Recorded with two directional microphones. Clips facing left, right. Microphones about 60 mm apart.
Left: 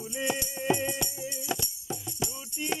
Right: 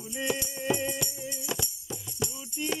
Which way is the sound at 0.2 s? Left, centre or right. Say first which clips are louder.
Even; centre.